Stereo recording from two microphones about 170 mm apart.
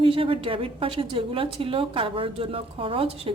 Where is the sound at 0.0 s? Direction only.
30° right (ahead or behind).